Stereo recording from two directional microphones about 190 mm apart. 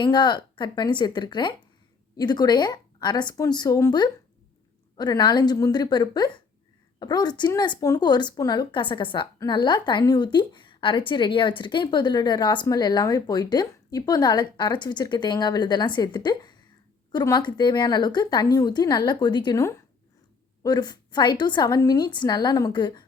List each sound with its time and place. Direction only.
0.0 s a woman's voice: 25° left (ahead or behind)